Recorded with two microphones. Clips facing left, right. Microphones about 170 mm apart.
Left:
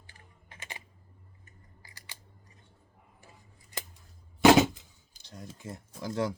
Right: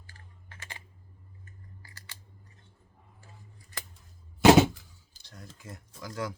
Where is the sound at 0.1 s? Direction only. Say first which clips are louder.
Even; 15° left (ahead or behind).